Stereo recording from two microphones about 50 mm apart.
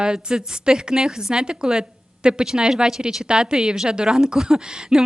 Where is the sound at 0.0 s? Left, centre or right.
Centre.